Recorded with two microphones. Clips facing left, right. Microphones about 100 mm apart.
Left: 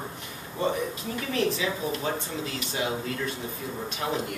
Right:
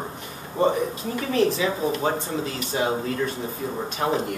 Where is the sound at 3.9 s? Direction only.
40° right (ahead or behind).